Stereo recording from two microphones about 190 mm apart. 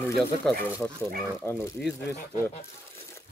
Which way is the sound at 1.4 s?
5° left (ahead or behind).